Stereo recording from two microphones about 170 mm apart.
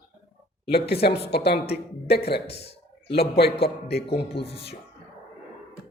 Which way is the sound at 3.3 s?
70° left (ahead or behind).